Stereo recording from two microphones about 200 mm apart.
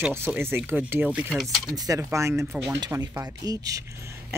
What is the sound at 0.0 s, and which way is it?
Speech, 10° right (ahead or behind).